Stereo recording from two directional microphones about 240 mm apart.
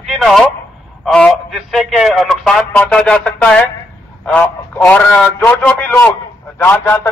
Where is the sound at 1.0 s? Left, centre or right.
Centre.